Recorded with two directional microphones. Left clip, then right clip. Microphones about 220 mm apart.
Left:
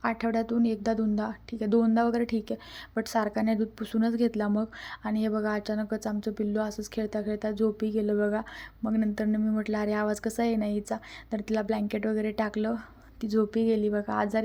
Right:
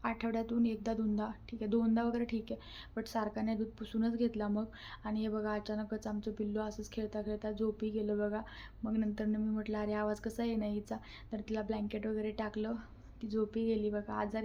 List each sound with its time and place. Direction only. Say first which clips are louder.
0.0 s a woman's voice: left 8 dB; 25° left (ahead or behind)